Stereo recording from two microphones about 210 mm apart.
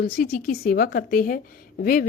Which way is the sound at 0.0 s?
45° left (ahead or behind).